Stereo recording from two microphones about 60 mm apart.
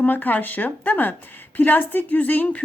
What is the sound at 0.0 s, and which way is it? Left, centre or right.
A woman's voice, left.